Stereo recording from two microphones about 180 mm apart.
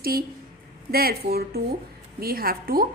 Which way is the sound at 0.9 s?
55° right (ahead or behind).